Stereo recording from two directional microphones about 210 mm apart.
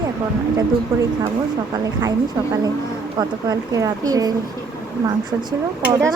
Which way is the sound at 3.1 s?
15° right (ahead or behind).